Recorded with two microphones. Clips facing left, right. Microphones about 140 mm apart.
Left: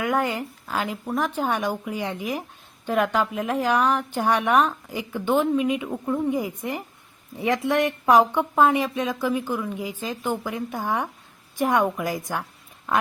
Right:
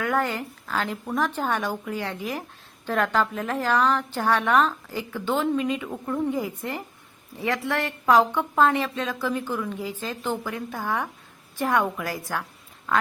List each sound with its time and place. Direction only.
0.0 s a woman's voice: 15° left (ahead or behind)